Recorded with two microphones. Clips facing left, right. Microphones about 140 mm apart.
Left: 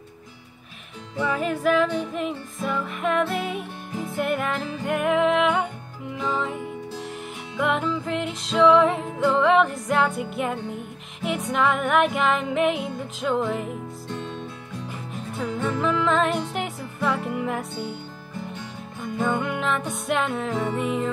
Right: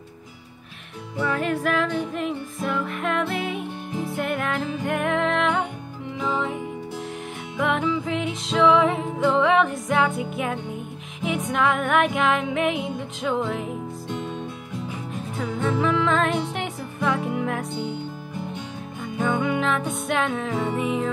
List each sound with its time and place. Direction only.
1.2 s music: centre (ahead or behind)
14.0 s music: 15° right (ahead or behind)
14.9 s music: 5° left (ahead or behind)
19.2 s music: centre (ahead or behind)